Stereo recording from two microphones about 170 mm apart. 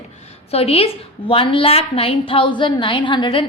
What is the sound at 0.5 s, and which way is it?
A woman's voice, 35° left (ahead or behind).